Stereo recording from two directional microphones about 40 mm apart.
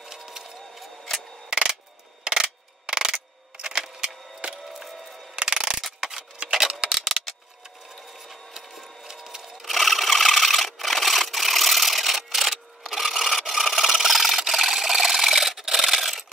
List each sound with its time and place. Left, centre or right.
0.0 s a sound: centre
4.7 s music: centre
5.4 s mechanisms: centre
5.9 s scissors: centre
8.3 s printer: centre
9.6 s sewing machine: centre